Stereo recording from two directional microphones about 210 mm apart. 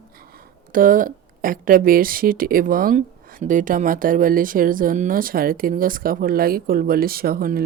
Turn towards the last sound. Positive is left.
turn(degrees=-45)  # may be behind; listen again after turning